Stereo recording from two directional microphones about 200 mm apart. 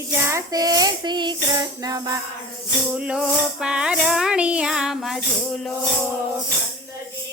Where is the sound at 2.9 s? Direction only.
5° right (ahead or behind).